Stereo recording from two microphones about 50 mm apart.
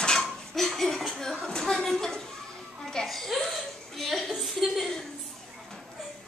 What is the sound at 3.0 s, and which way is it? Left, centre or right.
Laughter, centre.